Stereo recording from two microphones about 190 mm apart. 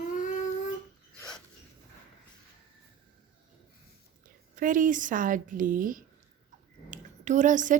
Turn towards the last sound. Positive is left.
turn(degrees=-40)  # may be behind; listen again after turning